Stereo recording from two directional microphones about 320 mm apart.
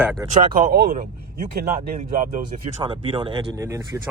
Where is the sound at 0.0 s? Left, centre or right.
Centre.